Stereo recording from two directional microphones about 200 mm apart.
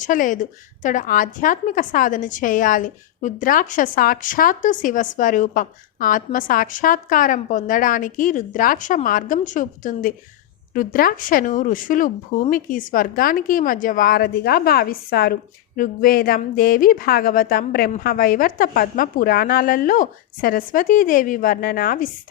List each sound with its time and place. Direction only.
0.0 s a woman's voice: 40° left (ahead or behind)